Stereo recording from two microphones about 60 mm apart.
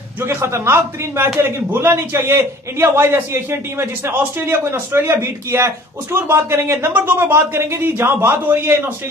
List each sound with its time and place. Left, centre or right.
0.2 s a man's voice: right
6.9 s a man's voice: right